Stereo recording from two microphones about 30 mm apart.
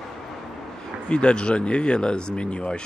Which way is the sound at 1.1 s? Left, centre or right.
Left.